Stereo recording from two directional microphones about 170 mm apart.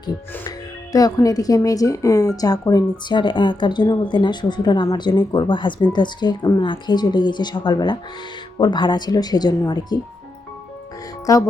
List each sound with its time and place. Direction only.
0.9 s a woman's voice: 20° left (ahead or behind)
11.3 s a woman's voice: 20° left (ahead or behind)